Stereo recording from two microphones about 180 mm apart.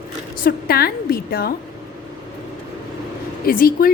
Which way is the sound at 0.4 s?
55° left (ahead or behind).